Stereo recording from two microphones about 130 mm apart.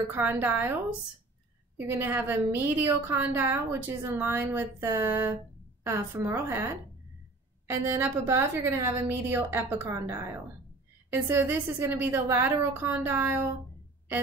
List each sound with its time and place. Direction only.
0.1 s a woman's voice: 15° right (ahead or behind)
1.8 s a woman's voice: 15° right (ahead or behind)